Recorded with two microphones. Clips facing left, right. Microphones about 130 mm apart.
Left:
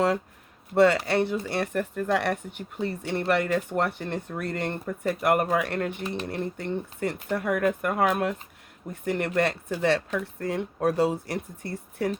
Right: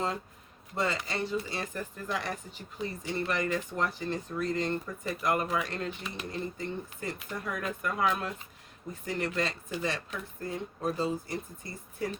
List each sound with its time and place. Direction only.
0.7 s speech: 70° left (ahead or behind)